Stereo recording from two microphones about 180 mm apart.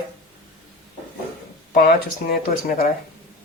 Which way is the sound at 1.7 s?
55° left (ahead or behind).